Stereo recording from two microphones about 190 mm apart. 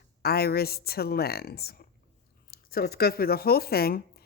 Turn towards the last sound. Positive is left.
turn(degrees=55)  # may be behind; listen again after turning